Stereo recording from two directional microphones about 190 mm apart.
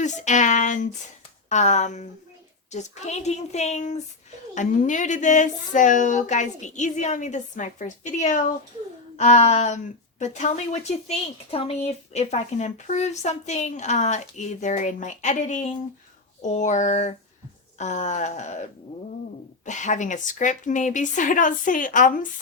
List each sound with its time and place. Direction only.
0.0 s speech: 40° left (ahead or behind)